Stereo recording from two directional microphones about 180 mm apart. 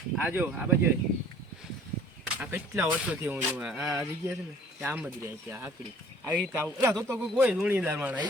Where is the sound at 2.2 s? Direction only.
10° right (ahead or behind).